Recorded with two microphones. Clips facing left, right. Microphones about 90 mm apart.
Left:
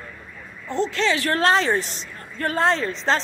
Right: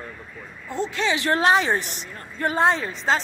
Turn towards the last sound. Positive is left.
turn(degrees=-10)  # may be behind; listen again after turning